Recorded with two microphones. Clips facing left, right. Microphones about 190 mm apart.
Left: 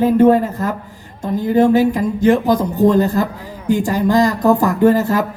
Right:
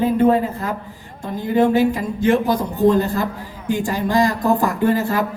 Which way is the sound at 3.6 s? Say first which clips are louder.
Left 5 dB; 40° left (ahead or behind).